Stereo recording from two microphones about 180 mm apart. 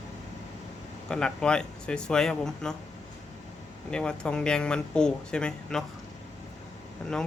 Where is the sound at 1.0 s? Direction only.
5° left (ahead or behind).